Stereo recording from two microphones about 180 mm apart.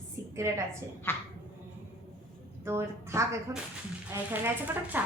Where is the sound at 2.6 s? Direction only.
15° right (ahead or behind).